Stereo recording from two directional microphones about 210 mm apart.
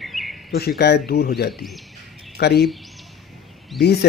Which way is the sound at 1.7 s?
Centre (ahead or behind).